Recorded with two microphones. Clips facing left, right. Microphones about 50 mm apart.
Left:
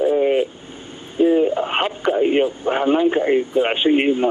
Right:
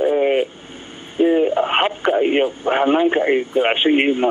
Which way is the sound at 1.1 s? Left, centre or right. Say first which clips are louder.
Even; right.